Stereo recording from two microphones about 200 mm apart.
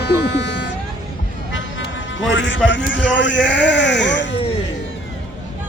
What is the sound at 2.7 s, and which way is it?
Sheep, 65° left (ahead or behind).